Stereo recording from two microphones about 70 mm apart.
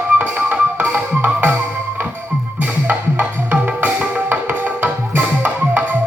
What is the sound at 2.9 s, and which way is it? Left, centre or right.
Music, right.